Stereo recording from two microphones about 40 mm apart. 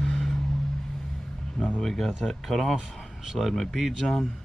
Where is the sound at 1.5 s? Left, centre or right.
Left.